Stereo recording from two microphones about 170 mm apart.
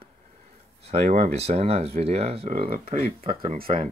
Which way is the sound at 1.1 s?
55° right (ahead or behind).